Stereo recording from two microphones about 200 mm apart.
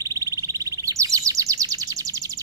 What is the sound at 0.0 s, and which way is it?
Chirp, 15° right (ahead or behind).